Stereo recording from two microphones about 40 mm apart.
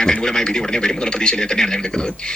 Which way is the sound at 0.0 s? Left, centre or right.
Centre.